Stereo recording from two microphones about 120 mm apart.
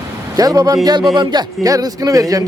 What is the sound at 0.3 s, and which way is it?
A man's voice, 30° right (ahead or behind).